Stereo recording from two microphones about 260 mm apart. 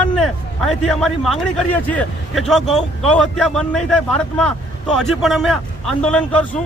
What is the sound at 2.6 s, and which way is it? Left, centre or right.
Speech, left.